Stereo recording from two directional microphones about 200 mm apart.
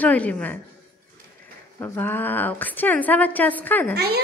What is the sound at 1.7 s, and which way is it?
A child's voice, 10° left (ahead or behind).